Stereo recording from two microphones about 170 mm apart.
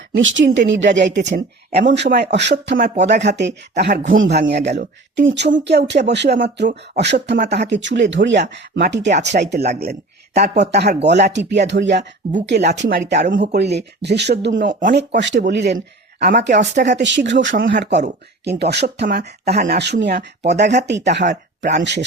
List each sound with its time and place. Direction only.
0.2 s speech: 90° right
7.0 s speech: 90° right
10.4 s speech: 75° right (ahead or behind)
14.7 s speech: 50° right (ahead or behind)
14.9 s speech: 90° right
18.4 s speech: 80° right
19.0 s speech: 70° right (ahead or behind)